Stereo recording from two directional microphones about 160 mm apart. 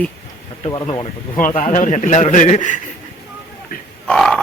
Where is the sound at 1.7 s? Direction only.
50° left (ahead or behind).